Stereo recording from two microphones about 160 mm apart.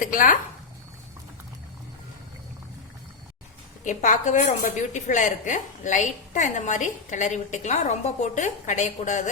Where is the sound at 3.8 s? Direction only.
50° left (ahead or behind).